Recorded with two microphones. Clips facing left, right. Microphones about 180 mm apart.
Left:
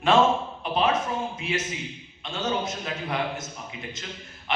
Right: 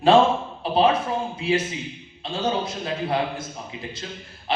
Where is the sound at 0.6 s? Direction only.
35° right (ahead or behind).